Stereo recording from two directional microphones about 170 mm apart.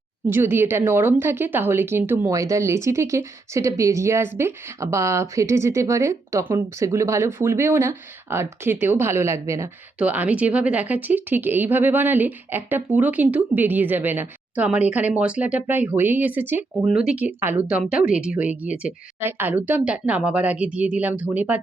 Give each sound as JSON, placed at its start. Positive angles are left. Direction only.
{"t": 0.3, "sound": "speech", "side_deg": -15}